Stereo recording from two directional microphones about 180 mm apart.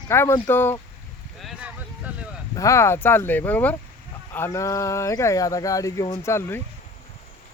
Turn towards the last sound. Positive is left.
turn(degrees=15)  # may be behind; listen again after turning